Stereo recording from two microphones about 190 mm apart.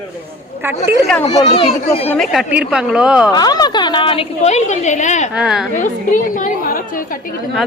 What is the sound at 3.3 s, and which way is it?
A woman's voice, 20° left (ahead or behind).